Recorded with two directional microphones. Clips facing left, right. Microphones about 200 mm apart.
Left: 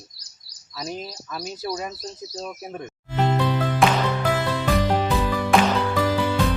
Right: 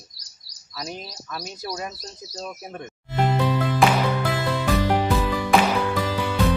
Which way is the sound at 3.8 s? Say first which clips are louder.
Even; centre (ahead or behind).